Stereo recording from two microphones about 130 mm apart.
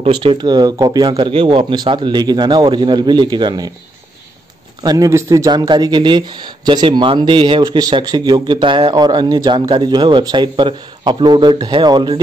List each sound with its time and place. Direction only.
0.0 s speech: 40° right (ahead or behind)
4.8 s speech: 25° right (ahead or behind)